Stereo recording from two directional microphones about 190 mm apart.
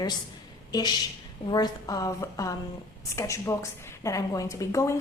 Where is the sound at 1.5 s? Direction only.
20° left (ahead or behind).